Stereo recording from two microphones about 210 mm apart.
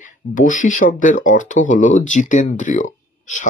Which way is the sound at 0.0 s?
40° left (ahead or behind).